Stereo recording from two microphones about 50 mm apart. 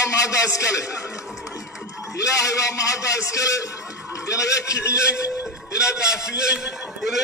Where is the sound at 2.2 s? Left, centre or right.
Left.